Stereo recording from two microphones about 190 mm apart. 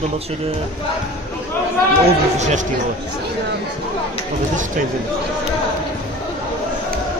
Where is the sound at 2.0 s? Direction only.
35° right (ahead or behind).